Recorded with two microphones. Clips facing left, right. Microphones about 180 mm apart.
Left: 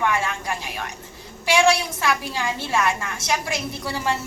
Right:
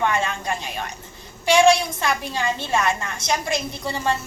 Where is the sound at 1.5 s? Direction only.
20° right (ahead or behind).